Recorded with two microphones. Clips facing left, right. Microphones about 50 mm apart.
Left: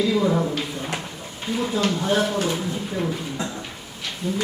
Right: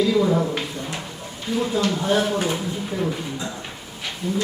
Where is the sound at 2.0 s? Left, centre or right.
Centre.